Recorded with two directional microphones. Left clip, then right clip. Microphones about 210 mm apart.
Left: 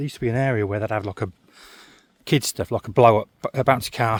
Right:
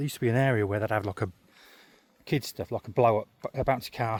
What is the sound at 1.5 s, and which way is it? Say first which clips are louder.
Speech: left 8 dB; 30° left (ahead or behind).